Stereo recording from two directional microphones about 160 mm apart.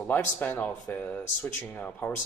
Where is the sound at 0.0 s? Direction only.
10° left (ahead or behind).